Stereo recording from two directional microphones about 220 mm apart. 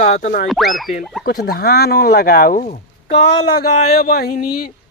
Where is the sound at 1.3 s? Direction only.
40° left (ahead or behind).